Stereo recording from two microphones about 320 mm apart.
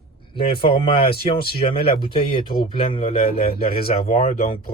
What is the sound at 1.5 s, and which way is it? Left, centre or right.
Speech, left.